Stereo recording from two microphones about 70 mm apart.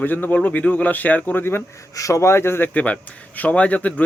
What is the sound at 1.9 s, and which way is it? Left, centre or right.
A man's voice, left.